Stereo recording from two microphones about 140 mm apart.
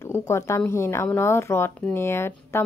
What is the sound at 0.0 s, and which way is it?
Speech, 20° left (ahead or behind).